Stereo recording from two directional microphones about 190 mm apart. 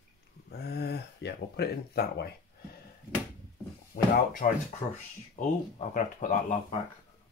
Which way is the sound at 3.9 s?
45° left (ahead or behind).